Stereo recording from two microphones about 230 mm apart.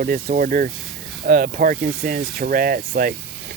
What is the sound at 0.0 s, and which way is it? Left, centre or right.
Speech, right.